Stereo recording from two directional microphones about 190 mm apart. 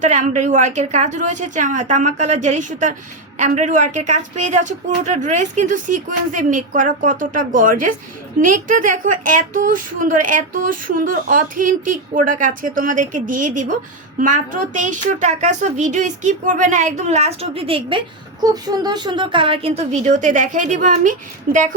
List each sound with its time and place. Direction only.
0.0 s speech: 40° right (ahead or behind)